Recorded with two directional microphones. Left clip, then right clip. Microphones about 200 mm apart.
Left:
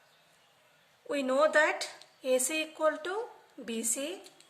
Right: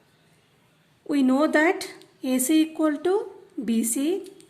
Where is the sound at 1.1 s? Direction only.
35° right (ahead or behind).